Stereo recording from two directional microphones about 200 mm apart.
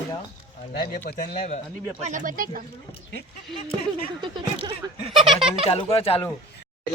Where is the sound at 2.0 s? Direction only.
40° right (ahead or behind).